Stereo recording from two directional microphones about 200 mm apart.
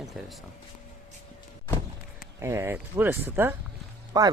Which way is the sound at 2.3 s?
15° right (ahead or behind).